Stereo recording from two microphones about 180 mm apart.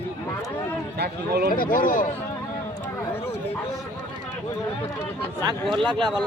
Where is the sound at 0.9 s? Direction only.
60° right (ahead or behind).